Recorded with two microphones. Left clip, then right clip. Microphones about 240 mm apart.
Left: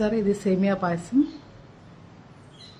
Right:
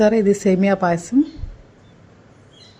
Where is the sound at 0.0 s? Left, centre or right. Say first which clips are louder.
Right 9 dB; right.